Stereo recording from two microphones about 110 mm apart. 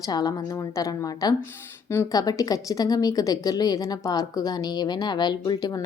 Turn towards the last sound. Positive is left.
turn(degrees=40)  # may be behind; listen again after turning